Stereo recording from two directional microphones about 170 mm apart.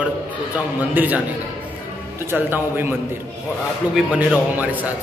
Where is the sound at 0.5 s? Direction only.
10° right (ahead or behind).